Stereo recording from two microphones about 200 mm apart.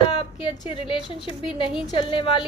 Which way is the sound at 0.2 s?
25° left (ahead or behind).